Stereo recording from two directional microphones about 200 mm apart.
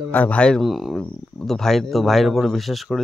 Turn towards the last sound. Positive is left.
turn(degrees=0)  # may be behind; listen again after turning